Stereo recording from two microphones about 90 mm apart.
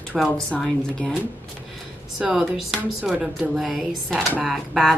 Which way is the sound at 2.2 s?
5° right (ahead or behind).